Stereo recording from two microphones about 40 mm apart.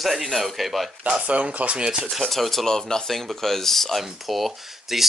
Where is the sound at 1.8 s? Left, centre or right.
Centre.